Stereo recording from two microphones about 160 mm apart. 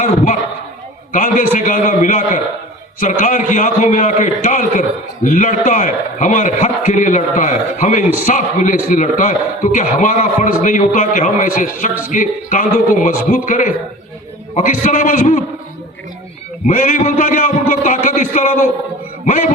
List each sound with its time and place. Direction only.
1.1 s a man's voice: 55° left (ahead or behind)
16.6 s a man's voice: 55° left (ahead or behind)